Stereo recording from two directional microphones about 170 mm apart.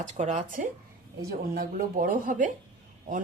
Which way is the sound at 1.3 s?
60° right (ahead or behind).